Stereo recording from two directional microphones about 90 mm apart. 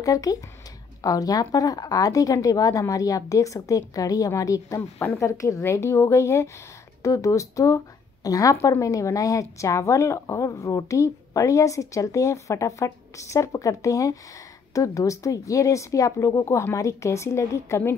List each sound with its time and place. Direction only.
0.0 s a woman's voice: 40° left (ahead or behind)